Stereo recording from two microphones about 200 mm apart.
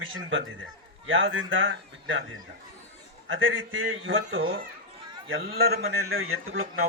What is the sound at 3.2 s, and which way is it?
A man's voice, 75° right (ahead or behind).